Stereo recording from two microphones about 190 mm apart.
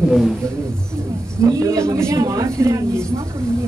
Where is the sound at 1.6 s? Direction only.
15° right (ahead or behind).